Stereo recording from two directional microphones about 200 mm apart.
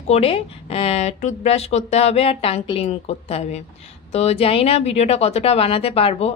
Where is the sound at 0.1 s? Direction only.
30° left (ahead or behind).